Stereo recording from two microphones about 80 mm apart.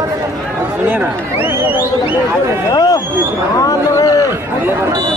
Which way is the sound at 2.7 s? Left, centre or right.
Left.